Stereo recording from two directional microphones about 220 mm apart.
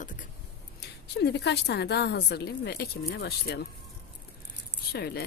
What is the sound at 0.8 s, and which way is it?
A woman's voice, 50° left (ahead or behind).